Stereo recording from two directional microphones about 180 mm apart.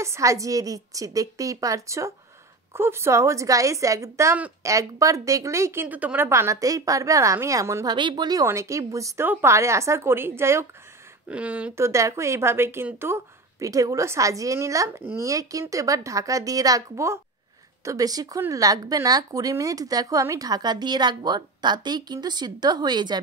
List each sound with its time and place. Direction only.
0.0 s a woman's voice: 15° right (ahead or behind)